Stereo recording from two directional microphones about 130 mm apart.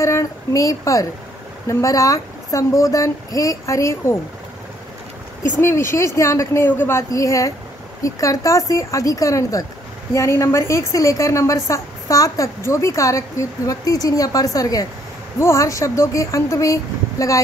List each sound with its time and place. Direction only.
0.0 s a woman's voice: 25° left (ahead or behind)
5.6 s a woman's voice: 20° left (ahead or behind)